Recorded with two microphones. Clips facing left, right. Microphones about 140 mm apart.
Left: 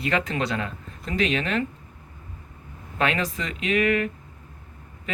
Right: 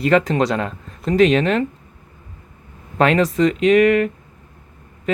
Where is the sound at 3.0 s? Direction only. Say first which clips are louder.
Right 10 dB; 40° right (ahead or behind).